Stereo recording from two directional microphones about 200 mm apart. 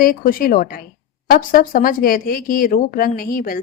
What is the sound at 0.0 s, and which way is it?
Speech, 45° left (ahead or behind).